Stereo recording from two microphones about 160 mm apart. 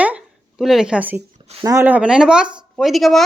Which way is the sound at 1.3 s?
40° right (ahead or behind).